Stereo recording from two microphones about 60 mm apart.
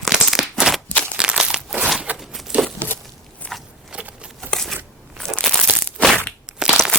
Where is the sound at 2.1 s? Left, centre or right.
Centre.